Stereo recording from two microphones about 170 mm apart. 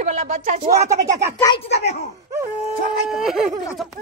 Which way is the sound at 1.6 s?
40° left (ahead or behind).